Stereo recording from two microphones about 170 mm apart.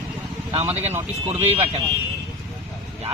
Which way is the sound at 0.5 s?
40° right (ahead or behind).